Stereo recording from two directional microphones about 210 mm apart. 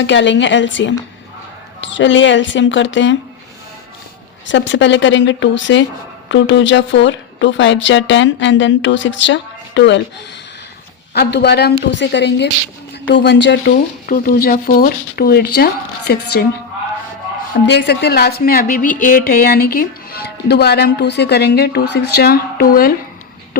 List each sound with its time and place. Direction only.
0.0 s a woman's voice: 60° left (ahead or behind)
4.4 s a woman's voice: 60° left (ahead or behind)
11.1 s a woman's voice: 50° left (ahead or behind)
14.1 s speech: 45° left (ahead or behind)
17.7 s speech: 55° left (ahead or behind)